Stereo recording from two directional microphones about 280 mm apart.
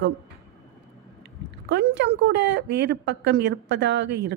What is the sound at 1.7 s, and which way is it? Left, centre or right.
A woman's voice, right.